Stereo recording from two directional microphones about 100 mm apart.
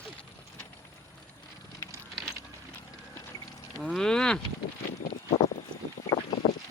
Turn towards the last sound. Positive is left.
turn(degrees=60)  # may be behind; listen again after turning